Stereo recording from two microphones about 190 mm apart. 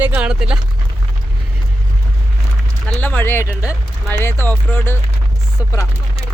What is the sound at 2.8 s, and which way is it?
Speech, 10° left (ahead or behind).